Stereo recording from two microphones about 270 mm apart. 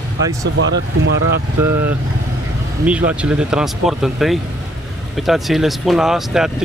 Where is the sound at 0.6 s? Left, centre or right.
Right.